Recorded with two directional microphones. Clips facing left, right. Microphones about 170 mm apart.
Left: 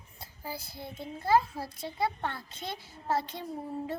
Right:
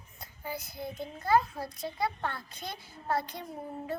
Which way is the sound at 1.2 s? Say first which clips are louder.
Left 1 dB; 25° left (ahead or behind).